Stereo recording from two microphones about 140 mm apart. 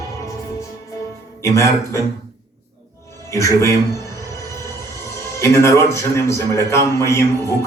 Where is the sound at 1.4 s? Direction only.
20° left (ahead or behind).